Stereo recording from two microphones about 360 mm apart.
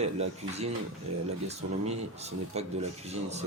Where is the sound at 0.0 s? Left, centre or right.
Centre.